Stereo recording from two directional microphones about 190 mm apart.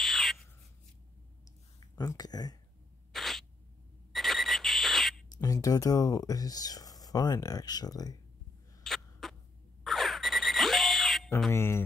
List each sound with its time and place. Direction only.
0.0 s a sound: centre (ahead or behind)
2.0 s speech: 20° left (ahead or behind)
3.1 s a sound: centre (ahead or behind)
5.4 s speech: 20° left (ahead or behind)
8.8 s rodents: centre (ahead or behind)
9.8 s frog: centre (ahead or behind)
11.5 s speech: 15° left (ahead or behind)